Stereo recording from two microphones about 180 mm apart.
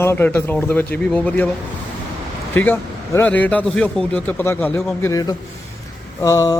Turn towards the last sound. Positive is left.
turn(degrees=15)  # may be behind; listen again after turning